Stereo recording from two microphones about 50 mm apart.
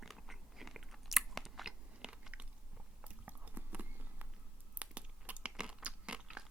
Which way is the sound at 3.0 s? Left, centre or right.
Right.